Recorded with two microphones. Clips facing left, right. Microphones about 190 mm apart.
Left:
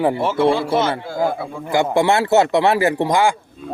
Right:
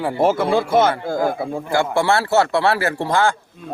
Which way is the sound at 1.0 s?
50° right (ahead or behind).